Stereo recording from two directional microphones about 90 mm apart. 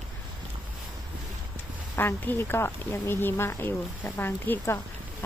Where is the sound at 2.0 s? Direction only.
25° left (ahead or behind).